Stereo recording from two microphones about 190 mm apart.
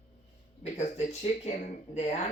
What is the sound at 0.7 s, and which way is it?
Speech, 35° left (ahead or behind).